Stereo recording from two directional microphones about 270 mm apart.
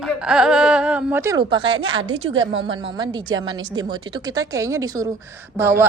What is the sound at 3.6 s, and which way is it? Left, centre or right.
A woman's voice, centre.